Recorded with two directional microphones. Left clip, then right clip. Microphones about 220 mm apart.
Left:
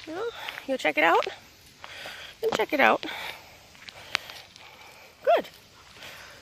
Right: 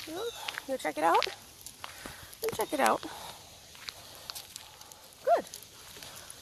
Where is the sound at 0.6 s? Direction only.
45° left (ahead or behind).